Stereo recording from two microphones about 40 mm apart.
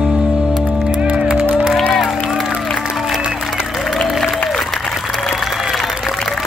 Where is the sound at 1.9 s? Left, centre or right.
Centre.